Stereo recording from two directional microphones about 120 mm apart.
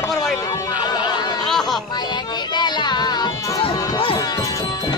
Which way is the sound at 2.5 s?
35° left (ahead or behind).